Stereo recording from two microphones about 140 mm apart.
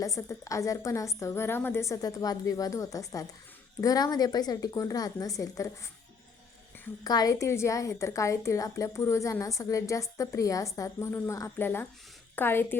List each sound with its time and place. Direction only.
0.0 s a woman's voice: 20° left (ahead or behind)
7.0 s a woman's voice: 25° left (ahead or behind)